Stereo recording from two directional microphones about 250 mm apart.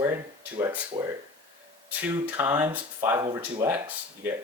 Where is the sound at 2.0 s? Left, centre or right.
Centre.